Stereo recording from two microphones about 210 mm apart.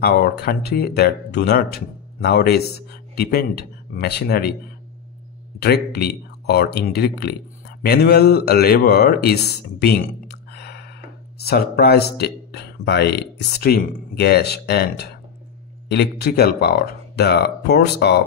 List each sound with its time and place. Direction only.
0.0 s speech: 45° left (ahead or behind)
5.6 s speech: 50° left (ahead or behind)